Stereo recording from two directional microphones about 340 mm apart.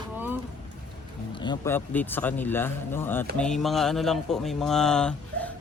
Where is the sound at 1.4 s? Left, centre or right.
Centre.